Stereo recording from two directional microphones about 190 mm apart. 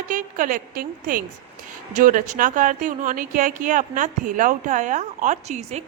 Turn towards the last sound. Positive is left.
turn(degrees=-35)  # may be behind; listen again after turning